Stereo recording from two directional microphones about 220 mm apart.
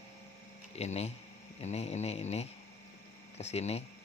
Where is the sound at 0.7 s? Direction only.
30° left (ahead or behind).